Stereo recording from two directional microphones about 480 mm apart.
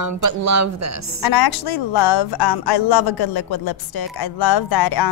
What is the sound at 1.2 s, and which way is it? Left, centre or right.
A woman's voice, left.